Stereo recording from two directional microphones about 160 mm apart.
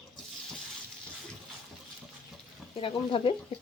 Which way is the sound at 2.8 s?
35° left (ahead or behind).